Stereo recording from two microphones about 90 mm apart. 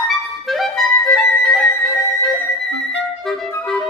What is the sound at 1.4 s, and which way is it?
Music, centre (ahead or behind).